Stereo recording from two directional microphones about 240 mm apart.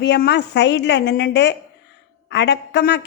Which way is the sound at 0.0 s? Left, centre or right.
Left.